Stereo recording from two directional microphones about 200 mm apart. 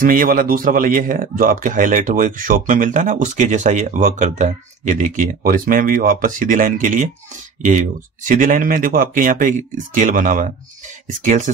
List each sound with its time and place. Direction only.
0.0 s speech: 45° right (ahead or behind)